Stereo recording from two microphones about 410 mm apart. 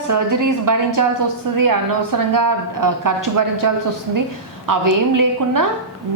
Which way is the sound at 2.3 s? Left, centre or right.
Right.